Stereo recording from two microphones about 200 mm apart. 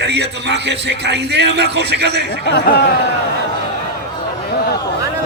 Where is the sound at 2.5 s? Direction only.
50° left (ahead or behind).